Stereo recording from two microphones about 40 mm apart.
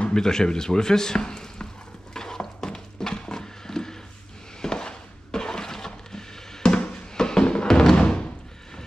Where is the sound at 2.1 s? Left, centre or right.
Centre.